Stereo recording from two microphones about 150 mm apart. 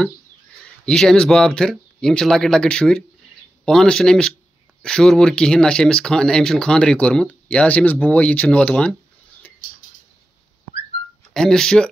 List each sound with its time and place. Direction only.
0.8 s speech: 5° left (ahead or behind)
11.3 s speech: 5° left (ahead or behind)